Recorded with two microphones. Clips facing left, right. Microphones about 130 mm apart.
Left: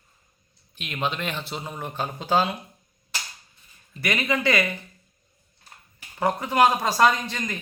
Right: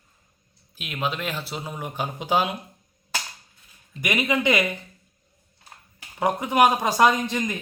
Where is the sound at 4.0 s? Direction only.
15° right (ahead or behind).